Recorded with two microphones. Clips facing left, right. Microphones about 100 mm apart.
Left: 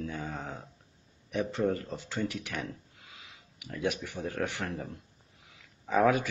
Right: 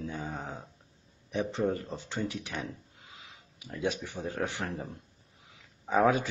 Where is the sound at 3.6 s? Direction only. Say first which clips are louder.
Even; 25° right (ahead or behind).